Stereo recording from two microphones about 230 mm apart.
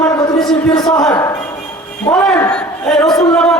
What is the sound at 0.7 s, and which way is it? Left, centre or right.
Speech, centre.